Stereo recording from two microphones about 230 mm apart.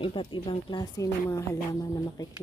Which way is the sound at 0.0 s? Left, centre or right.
Left.